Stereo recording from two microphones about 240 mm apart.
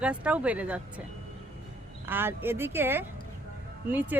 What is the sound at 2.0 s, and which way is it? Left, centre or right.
Speech, centre.